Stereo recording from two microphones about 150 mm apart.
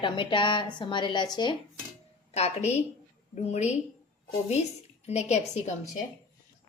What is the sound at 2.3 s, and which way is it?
A woman's voice, 45° left (ahead or behind).